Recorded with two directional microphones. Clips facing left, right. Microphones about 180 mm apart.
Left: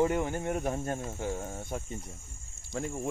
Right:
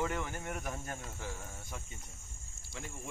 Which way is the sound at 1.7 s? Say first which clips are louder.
Left 10 dB; 45° left (ahead or behind).